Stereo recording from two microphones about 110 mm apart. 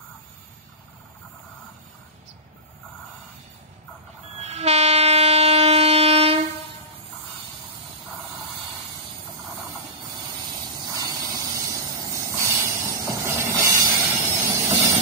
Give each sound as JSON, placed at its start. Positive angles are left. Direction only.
{"t": 4.4, "sound": "train", "side_deg": -75}
{"t": 10.9, "sound": "hiss", "side_deg": -35}
{"t": 14.0, "sound": "vehicle", "side_deg": -20}